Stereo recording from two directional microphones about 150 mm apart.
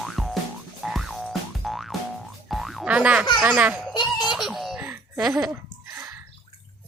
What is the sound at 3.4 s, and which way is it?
Speech, 10° right (ahead or behind).